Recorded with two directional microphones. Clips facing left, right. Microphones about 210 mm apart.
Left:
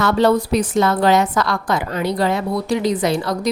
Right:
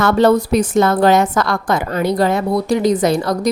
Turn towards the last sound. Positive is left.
turn(degrees=-45)  # may be behind; listen again after turning